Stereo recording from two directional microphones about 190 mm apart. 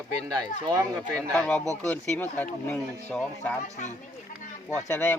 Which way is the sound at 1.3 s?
5° left (ahead or behind).